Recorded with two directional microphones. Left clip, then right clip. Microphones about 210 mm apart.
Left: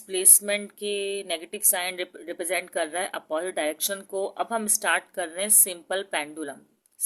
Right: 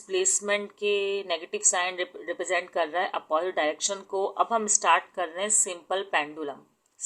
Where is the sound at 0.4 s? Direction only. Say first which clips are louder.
Right 2 dB; 20° left (ahead or behind).